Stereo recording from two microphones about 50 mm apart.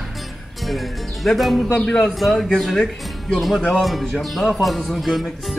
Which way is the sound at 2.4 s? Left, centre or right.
Centre.